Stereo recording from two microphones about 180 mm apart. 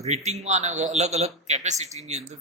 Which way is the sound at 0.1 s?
40° right (ahead or behind).